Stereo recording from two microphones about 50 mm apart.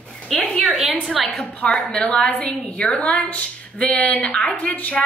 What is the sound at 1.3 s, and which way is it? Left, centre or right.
A woman's voice, left.